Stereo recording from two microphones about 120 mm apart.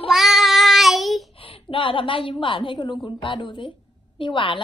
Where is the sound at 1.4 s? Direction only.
45° left (ahead or behind).